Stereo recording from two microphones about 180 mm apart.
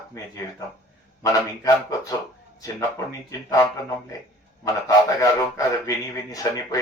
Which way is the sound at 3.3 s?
20° left (ahead or behind).